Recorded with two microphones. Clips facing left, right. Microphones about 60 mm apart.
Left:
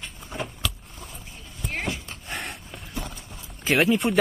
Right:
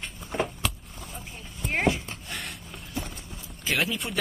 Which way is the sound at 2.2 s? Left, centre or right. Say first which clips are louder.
Left 3 dB; left.